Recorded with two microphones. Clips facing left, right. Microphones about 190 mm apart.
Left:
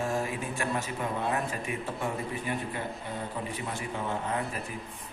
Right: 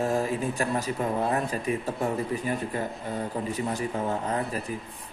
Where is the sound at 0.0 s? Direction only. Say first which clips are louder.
Right 5 dB; 40° right (ahead or behind).